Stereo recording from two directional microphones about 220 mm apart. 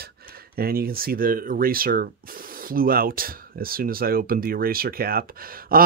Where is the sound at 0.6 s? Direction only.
40° right (ahead or behind).